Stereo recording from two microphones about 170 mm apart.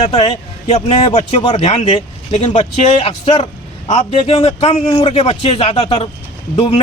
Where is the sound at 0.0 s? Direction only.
40° left (ahead or behind).